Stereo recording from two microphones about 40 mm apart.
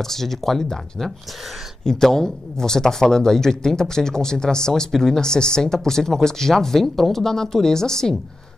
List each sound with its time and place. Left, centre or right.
0.0 s speech: centre